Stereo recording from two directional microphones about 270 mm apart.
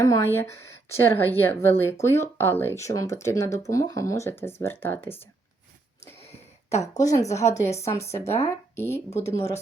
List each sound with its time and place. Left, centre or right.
0.0 s speech: centre
6.1 s a sound: left
6.7 s speech: centre
9.0 s speech: left